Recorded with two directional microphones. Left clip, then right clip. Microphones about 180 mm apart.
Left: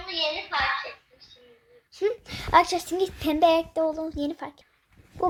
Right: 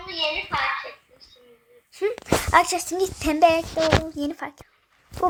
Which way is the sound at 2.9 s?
5° left (ahead or behind).